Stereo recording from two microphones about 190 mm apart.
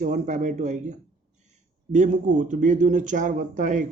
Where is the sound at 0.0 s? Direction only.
40° right (ahead or behind).